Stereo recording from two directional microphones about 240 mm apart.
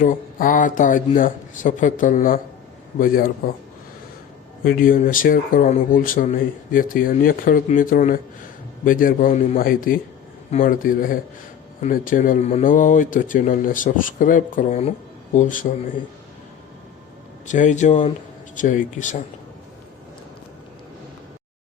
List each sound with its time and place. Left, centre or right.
0.0 s speech: left
4.6 s speech: left
17.4 s speech: left